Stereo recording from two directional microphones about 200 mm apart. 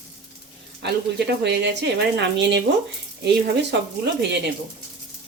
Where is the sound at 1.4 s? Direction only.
60° right (ahead or behind).